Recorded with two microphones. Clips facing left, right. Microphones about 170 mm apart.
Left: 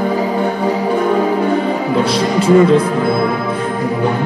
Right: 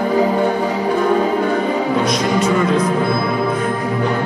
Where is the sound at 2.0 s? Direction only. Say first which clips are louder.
Left 1 dB; 30° left (ahead or behind).